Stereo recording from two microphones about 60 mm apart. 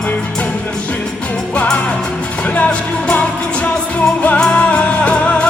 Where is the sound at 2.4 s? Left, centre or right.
Left.